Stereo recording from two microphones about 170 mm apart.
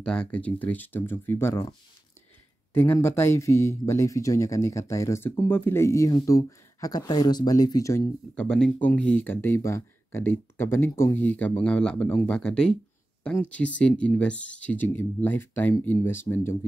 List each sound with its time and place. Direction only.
0.0 s speech: 5° left (ahead or behind)
2.7 s speech: 15° left (ahead or behind)
8.4 s speech: 5° left (ahead or behind)